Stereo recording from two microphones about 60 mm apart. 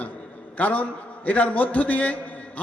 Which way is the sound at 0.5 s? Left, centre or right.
Left.